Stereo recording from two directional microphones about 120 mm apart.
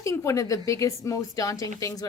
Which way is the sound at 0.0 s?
25° left (ahead or behind).